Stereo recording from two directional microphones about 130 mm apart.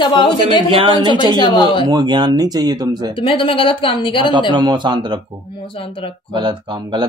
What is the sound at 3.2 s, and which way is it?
Speech, 40° left (ahead or behind).